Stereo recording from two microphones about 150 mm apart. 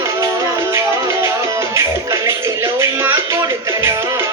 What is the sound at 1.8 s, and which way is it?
Music, 20° right (ahead or behind).